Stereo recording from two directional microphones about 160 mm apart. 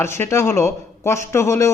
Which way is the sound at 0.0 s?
15° left (ahead or behind).